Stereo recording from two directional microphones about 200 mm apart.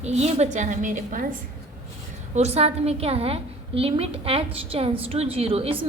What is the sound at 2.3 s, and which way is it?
A woman's voice, 30° right (ahead or behind).